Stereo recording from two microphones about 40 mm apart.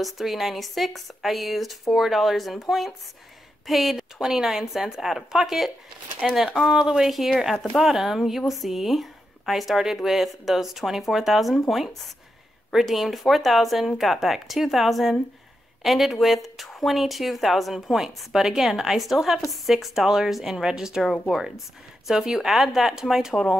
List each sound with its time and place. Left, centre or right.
0.0 s speech: centre
4.2 s speech: centre
12.7 s speech: centre
23.3 s speech: centre